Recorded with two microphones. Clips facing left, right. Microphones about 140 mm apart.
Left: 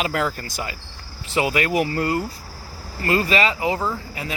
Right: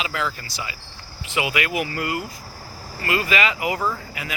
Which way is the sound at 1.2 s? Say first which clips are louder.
Left 3 dB; 40° left (ahead or behind).